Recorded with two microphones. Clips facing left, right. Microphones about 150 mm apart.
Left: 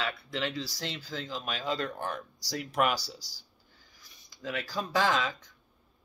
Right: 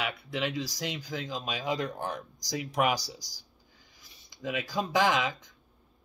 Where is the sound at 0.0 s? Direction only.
15° right (ahead or behind).